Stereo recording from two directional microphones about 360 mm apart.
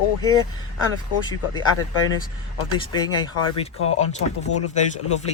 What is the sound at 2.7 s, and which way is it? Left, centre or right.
Speech, centre.